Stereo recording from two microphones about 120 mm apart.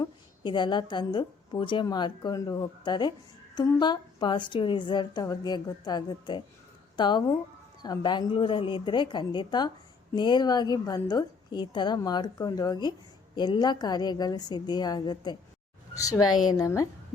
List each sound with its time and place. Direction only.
0.0 s a woman's voice: 40° left (ahead or behind)